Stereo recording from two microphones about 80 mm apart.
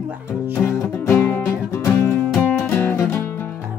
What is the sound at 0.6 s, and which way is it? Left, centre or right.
Music, left.